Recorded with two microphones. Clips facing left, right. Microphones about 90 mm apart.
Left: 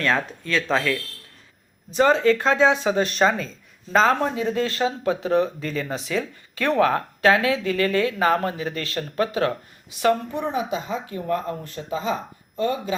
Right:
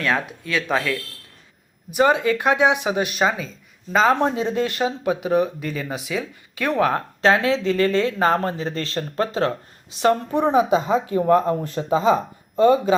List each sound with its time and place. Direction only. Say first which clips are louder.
0.0 s speech: even; 10° right (ahead or behind)
4.1 s speech: right 2 dB; 20° right (ahead or behind); by 10.6 s 35° right (ahead or behind)
10.6 s speech: right 9 dB; 25° right (ahead or behind)